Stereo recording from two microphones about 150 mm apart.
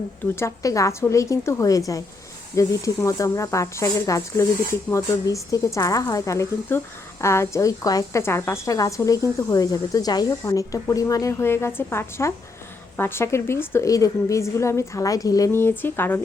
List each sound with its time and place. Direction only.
0.3 s a woman's voice: 20° left (ahead or behind)